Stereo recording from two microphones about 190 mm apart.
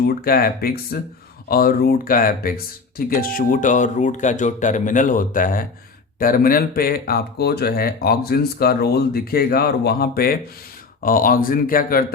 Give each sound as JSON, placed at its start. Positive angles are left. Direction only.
{"t": 0.1, "sound": "speech", "side_deg": 50}